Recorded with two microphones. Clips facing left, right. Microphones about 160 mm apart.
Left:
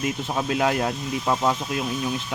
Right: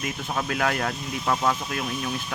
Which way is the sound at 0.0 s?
25° left (ahead or behind).